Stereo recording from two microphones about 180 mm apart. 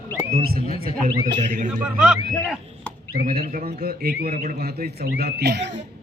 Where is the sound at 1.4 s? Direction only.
45° right (ahead or behind).